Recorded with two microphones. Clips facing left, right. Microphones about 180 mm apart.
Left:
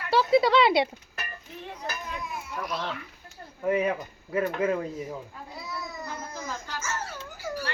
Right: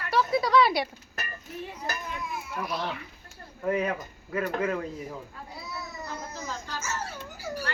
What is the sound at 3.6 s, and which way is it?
Speech, 10° left (ahead or behind).